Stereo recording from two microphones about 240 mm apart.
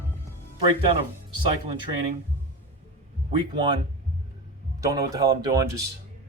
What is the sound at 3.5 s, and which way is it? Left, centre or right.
Speech, centre.